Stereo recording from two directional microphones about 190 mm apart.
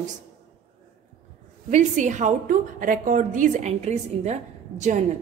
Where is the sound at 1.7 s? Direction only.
40° right (ahead or behind).